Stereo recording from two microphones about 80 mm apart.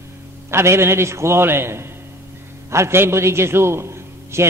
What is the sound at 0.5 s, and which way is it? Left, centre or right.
A man's voice, right.